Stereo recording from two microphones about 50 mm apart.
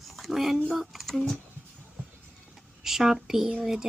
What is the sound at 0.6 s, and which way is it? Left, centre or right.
Speech, centre.